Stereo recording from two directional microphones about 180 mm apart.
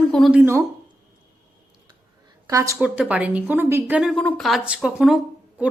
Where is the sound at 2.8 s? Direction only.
5° right (ahead or behind).